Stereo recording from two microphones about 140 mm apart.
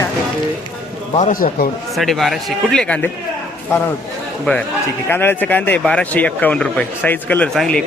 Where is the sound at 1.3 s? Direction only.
90° left.